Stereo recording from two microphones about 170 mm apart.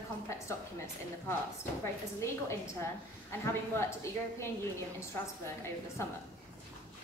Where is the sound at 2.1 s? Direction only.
15° left (ahead or behind).